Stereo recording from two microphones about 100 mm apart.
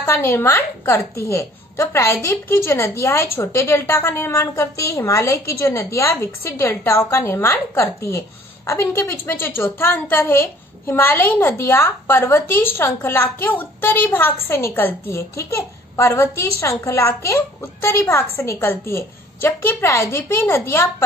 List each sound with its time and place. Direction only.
0.0 s a woman's voice: 25° left (ahead or behind)